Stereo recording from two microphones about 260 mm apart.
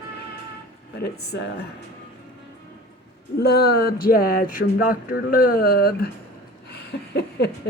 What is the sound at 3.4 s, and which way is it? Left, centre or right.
A woman's voice, left.